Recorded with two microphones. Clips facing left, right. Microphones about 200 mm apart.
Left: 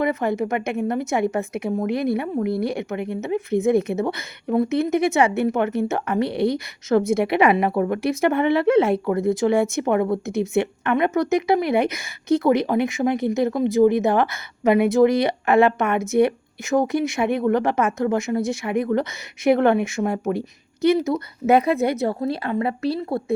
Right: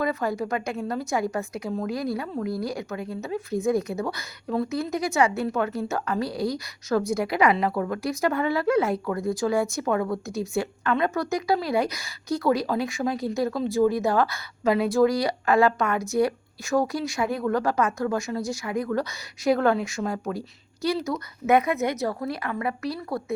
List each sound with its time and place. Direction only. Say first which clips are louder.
0.0 s a woman's voice: left 4 dB; 20° left (ahead or behind)